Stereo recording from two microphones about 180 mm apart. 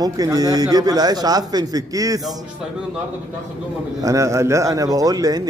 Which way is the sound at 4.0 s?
20° right (ahead or behind).